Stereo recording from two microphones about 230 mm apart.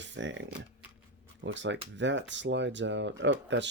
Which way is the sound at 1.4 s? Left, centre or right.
Right.